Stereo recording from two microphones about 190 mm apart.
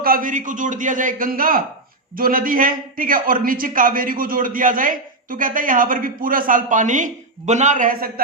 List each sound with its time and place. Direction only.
0.0 s a man's voice: 45° right (ahead or behind)